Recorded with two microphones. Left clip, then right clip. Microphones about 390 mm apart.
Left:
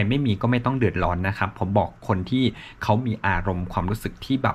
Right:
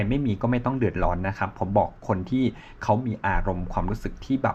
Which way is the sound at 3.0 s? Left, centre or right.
Centre.